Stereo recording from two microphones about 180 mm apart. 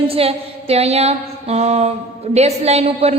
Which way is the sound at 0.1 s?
35° right (ahead or behind).